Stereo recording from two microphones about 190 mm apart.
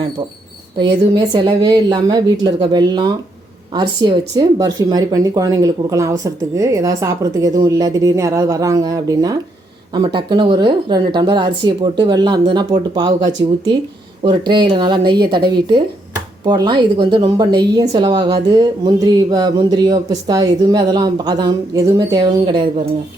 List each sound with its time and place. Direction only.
0.8 s speech: 20° right (ahead or behind)